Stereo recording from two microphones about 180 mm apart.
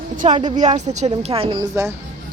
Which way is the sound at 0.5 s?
40° right (ahead or behind).